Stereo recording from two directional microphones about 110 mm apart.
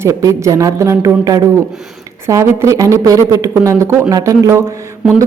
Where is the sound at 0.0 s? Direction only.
30° right (ahead or behind).